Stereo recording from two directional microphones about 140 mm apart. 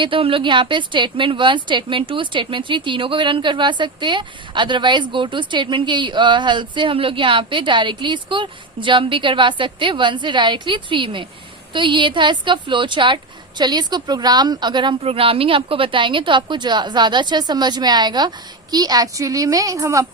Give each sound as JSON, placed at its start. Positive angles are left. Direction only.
{"t": 0.0, "sound": "a woman's voice", "side_deg": -40}